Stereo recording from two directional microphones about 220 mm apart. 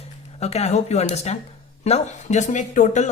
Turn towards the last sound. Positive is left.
turn(degrees=35)  # may be behind; listen again after turning